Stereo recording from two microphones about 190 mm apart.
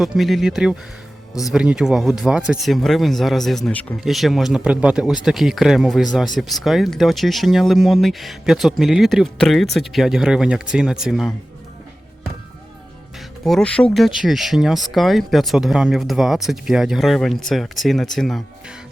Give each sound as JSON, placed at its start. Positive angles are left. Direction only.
{"t": 0.0, "sound": "speech", "side_deg": 0}
{"t": 1.3, "sound": "speech", "side_deg": 20}
{"t": 1.5, "sound": "speech", "side_deg": -5}
{"t": 13.1, "sound": "speech", "side_deg": 0}